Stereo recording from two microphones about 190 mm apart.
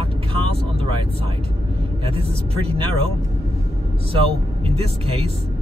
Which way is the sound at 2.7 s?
30° right (ahead or behind).